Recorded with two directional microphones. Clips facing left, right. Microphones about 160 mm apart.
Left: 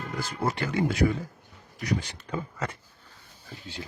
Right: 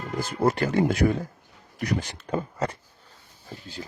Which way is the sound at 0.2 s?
50° right (ahead or behind).